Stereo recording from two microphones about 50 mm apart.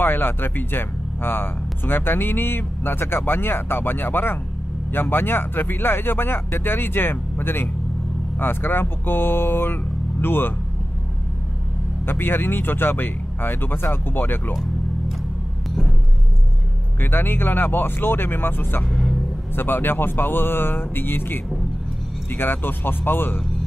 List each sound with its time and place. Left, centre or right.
0.0 s speech: left
12.1 s speech: left
14.5 s music: centre
17.0 s speech: left
18.9 s speech: centre
19.5 s speech: left